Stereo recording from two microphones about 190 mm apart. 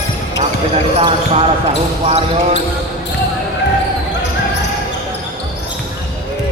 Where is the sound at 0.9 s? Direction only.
30° right (ahead or behind).